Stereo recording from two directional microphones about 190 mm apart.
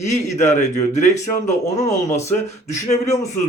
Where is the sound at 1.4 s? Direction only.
15° left (ahead or behind).